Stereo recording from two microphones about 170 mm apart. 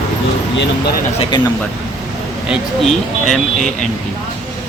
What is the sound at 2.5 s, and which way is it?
Speech, centre (ahead or behind).